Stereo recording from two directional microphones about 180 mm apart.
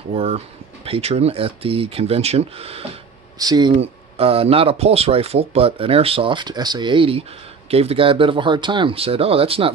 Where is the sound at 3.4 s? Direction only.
20° right (ahead or behind).